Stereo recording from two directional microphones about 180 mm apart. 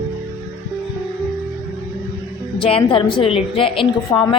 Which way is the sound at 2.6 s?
30° left (ahead or behind).